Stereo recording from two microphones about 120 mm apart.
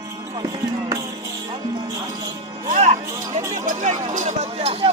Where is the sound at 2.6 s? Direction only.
75° right (ahead or behind).